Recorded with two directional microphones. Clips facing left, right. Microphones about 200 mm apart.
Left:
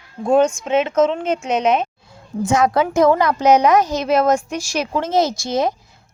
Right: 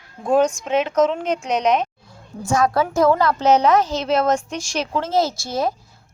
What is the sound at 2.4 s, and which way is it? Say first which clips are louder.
A woman's voice: left 2 dB; 20° left (ahead or behind).